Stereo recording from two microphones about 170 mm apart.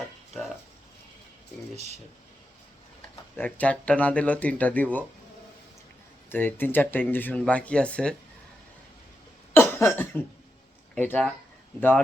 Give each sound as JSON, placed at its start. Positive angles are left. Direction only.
{"t": 1.7, "sound": "speech", "side_deg": -40}
{"t": 3.3, "sound": "speech", "side_deg": 10}
{"t": 6.3, "sound": "speech", "side_deg": 10}
{"t": 9.6, "sound": "cough", "side_deg": 15}
{"t": 10.9, "sound": "speech", "side_deg": 5}